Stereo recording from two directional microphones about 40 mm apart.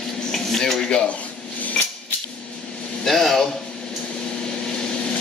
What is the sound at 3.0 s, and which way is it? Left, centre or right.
Speech, centre.